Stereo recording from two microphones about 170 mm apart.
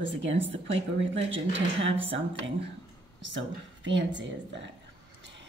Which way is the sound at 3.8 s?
90° right.